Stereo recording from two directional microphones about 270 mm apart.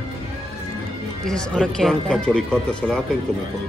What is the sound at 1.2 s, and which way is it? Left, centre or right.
Speech, centre.